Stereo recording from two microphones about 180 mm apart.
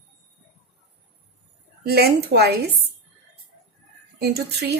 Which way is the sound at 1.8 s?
60° right (ahead or behind).